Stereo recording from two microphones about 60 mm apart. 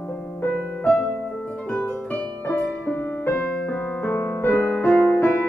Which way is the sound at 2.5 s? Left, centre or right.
Left.